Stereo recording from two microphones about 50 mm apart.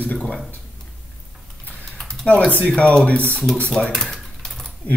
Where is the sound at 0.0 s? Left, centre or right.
Left.